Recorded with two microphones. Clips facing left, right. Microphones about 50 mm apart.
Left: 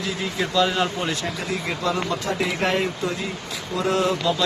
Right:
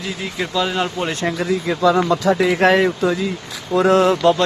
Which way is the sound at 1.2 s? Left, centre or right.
Right.